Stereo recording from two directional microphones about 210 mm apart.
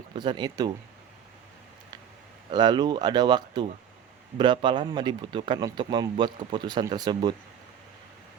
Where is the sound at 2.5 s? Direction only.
20° right (ahead or behind).